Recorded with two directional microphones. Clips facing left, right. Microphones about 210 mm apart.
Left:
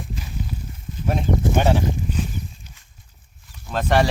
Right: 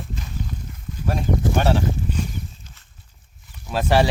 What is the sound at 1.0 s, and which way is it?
Speech, 20° left (ahead or behind).